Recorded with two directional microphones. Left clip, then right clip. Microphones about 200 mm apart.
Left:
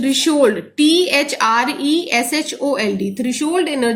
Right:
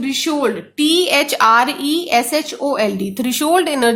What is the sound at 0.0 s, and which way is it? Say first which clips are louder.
A woman's voice: left 4 dB; 25° right (ahead or behind).